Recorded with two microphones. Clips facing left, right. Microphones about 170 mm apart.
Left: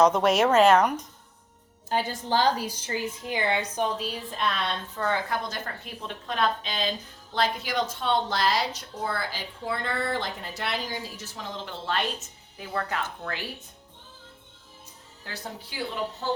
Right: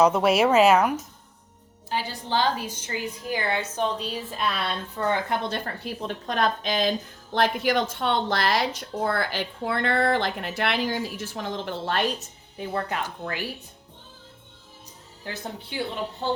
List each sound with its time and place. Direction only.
0.0 s a woman's voice: 5° right (ahead or behind)
1.9 s a woman's voice: 50° left (ahead or behind); by 3.8 s 15° left (ahead or behind)
3.9 s a woman's voice: centre (ahead or behind); by 12.0 s 55° right (ahead or behind)
12.2 s speech: 25° right (ahead or behind)
16.2 s speech: 25° right (ahead or behind)